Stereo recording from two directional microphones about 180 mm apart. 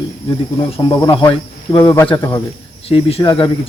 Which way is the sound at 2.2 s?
10° left (ahead or behind).